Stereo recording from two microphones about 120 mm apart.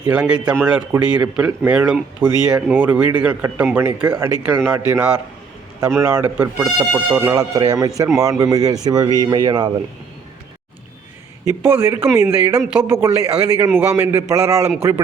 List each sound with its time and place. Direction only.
0.1 s a man's voice: 10° right (ahead or behind)
7.3 s a man's voice: 30° right (ahead or behind)
11.6 s a man's voice: 20° right (ahead or behind)